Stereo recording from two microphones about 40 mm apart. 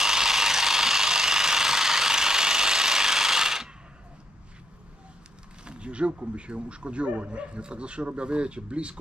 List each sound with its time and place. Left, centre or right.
0.0 s ratchet: centre
5.7 s speech: right